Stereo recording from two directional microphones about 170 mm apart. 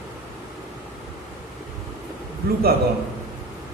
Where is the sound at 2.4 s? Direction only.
60° right (ahead or behind).